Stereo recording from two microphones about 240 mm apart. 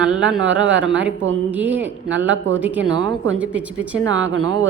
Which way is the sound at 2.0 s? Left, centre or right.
Right.